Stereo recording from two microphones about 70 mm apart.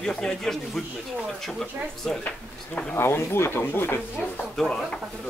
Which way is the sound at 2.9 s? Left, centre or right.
Left.